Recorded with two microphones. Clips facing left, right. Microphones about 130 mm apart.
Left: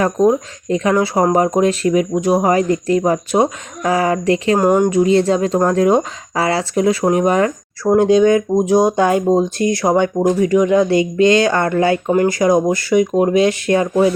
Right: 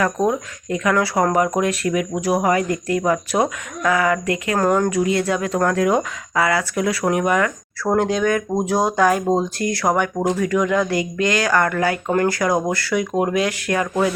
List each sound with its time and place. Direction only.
0.0 s speech: 25° left (ahead or behind)